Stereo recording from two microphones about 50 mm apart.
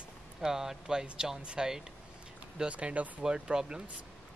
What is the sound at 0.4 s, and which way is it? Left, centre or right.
Speech, centre.